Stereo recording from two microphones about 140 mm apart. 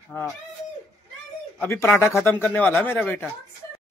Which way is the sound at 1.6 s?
15° left (ahead or behind).